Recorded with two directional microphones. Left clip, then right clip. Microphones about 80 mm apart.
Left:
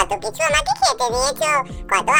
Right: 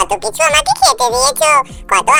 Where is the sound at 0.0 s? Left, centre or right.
Right.